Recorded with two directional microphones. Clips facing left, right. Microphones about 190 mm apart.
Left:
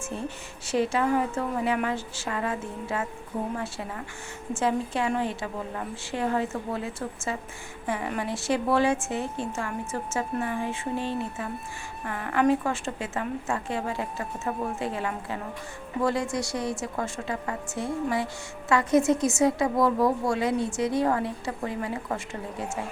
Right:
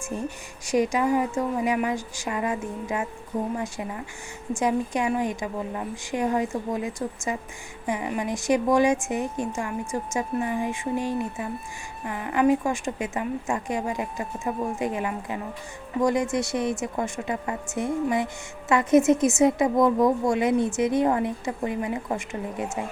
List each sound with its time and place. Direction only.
0.0 s a woman's voice: 15° right (ahead or behind)